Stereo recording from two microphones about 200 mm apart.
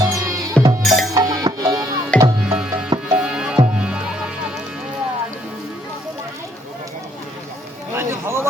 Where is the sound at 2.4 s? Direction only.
5° right (ahead or behind).